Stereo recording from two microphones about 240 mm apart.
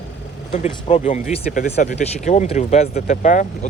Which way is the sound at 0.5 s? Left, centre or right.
Left.